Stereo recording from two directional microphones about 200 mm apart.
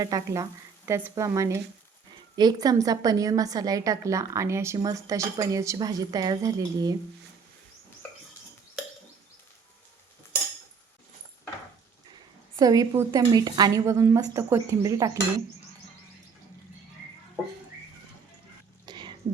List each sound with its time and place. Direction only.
0.0 s a woman's voice: 15° right (ahead or behind)
12.5 s a woman's voice: 20° right (ahead or behind)
18.9 s a sound: 20° right (ahead or behind)